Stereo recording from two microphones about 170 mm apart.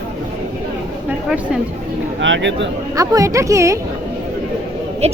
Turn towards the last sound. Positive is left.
turn(degrees=-40)  # may be behind; listen again after turning